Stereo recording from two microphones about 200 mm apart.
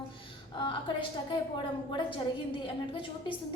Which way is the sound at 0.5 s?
25° left (ahead or behind).